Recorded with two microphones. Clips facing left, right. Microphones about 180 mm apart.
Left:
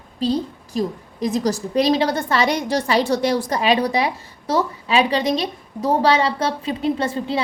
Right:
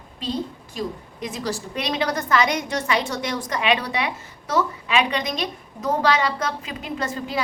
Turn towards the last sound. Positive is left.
turn(degrees=30)  # may be behind; listen again after turning